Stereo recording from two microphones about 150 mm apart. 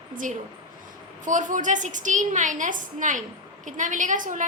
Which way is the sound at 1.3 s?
60° right (ahead or behind).